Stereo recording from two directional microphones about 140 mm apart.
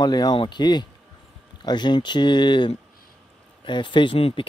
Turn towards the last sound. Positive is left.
turn(degrees=40)  # may be behind; listen again after turning